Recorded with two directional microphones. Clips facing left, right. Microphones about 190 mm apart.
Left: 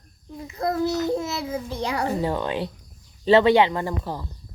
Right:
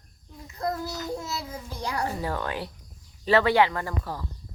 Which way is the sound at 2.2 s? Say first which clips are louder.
Left 6 dB; 20° left (ahead or behind).